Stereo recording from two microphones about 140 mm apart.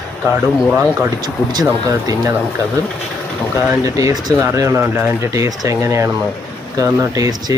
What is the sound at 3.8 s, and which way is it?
Speech, 25° right (ahead or behind).